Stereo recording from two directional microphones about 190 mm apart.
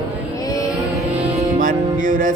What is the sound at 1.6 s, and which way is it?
Music, 45° right (ahead or behind).